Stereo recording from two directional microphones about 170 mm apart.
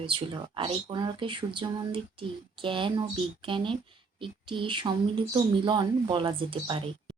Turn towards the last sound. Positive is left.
turn(degrees=-30)  # may be behind; listen again after turning